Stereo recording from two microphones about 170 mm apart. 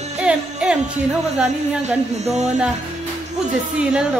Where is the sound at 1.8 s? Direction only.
40° right (ahead or behind).